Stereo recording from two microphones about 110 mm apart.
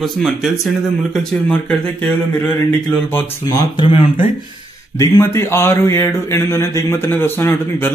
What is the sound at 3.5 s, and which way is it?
Speech, 45° left (ahead or behind).